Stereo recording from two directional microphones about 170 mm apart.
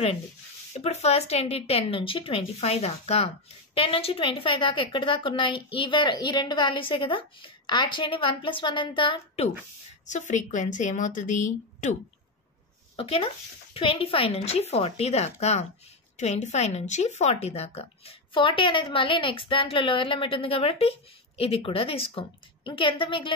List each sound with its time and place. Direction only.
0.7 s a woman's voice: 40° left (ahead or behind)
10.0 s speech: 45° left (ahead or behind)
12.9 s a woman's voice: 35° left (ahead or behind)